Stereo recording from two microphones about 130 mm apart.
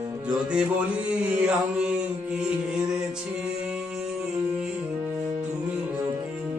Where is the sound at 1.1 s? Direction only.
10° right (ahead or behind).